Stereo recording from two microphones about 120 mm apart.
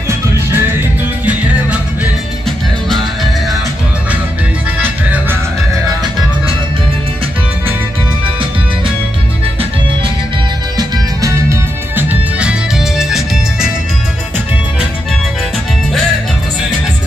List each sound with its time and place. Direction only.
0.5 s music: 15° right (ahead or behind)
4.8 s music: 15° right (ahead or behind)
10.8 s music: 30° right (ahead or behind); by 13.7 s 5° right (ahead or behind)